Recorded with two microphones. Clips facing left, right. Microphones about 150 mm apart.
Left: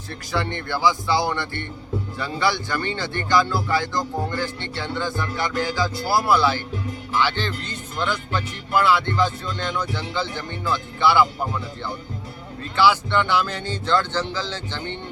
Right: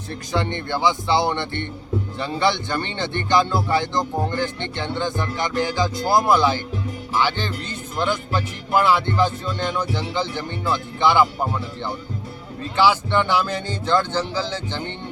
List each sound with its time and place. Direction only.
0.3 s speech: 20° right (ahead or behind)
7.1 s music: 15° right (ahead or behind)
12.7 s music: 15° right (ahead or behind)